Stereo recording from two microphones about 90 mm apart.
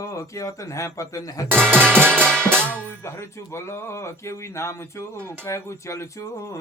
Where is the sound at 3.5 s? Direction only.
30° left (ahead or behind).